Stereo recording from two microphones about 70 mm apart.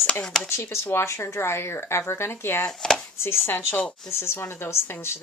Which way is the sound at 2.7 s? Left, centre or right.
Centre.